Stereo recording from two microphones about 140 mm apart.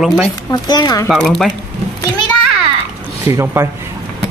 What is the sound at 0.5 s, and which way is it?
Speech, 30° left (ahead or behind).